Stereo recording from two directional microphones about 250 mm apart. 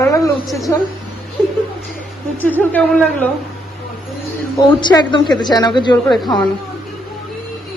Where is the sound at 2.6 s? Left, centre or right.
Centre.